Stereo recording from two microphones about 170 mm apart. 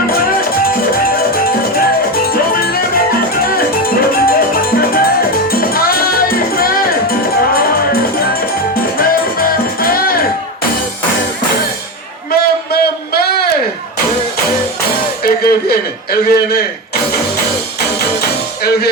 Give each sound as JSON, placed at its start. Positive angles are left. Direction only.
{"t": 1.0, "sound": "music", "side_deg": 60}
{"t": 3.4, "sound": "music", "side_deg": 60}
{"t": 8.2, "sound": "music", "side_deg": 60}
{"t": 12.3, "sound": "a sound", "side_deg": 65}
{"t": 15.2, "sound": "music", "side_deg": 65}
{"t": 16.2, "sound": "a sound", "side_deg": 70}
{"t": 18.6, "sound": "music", "side_deg": 70}